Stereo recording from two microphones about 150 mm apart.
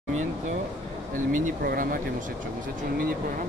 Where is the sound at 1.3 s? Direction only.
80° right.